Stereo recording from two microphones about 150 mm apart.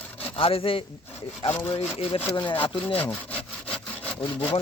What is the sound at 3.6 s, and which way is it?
Sawing, 10° left (ahead or behind).